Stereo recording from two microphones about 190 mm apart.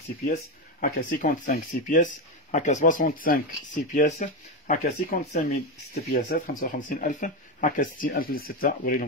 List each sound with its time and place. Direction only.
0.2 s speech: 45° left (ahead or behind)